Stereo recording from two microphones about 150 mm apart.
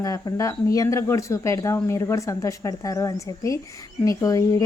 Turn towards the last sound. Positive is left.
turn(degrees=20)  # may be behind; listen again after turning